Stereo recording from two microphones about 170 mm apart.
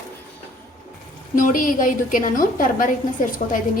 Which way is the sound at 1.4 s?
50° left (ahead or behind).